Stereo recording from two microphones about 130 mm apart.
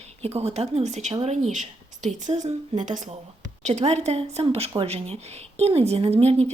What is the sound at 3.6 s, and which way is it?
A woman's voice, 60° right (ahead or behind).